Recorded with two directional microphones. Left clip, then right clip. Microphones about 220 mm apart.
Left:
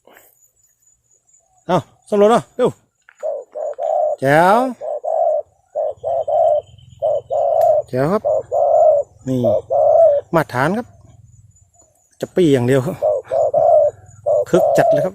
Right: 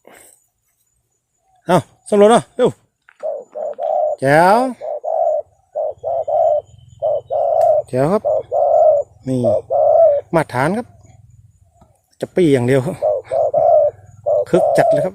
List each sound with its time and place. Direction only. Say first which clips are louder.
1.6 s a sound: right 3 dB; 20° right (ahead or behind)
3.2 s bird: even; centre (ahead or behind)
12.1 s bird: even; centre (ahead or behind)